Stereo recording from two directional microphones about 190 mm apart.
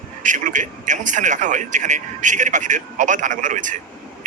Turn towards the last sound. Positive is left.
turn(degrees=-40)  # may be behind; listen again after turning